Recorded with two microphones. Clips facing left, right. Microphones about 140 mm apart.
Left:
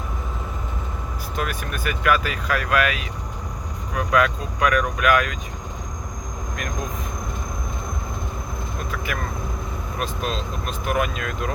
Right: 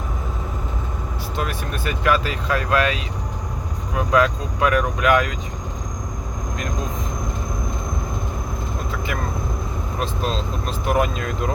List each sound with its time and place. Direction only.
1.4 s speech: 30° right (ahead or behind)
10.0 s speech: 30° right (ahead or behind)